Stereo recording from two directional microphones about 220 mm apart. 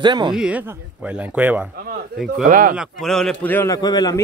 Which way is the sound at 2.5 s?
40° right (ahead or behind).